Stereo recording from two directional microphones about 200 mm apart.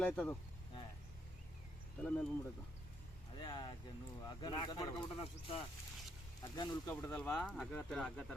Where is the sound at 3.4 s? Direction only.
20° left (ahead or behind).